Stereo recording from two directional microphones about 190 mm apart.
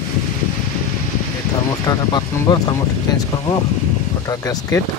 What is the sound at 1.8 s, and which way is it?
Speech, 20° left (ahead or behind).